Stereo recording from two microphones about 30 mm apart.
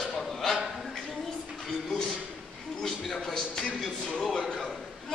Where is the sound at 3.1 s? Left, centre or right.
Centre.